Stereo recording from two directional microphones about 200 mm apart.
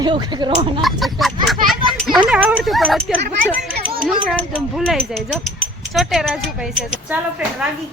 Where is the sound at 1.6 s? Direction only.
Centre (ahead or behind).